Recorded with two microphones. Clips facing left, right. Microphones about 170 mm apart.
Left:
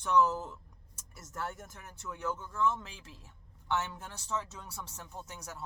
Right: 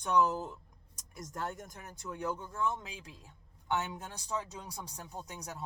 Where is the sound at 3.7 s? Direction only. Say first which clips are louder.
Even; 15° right (ahead or behind).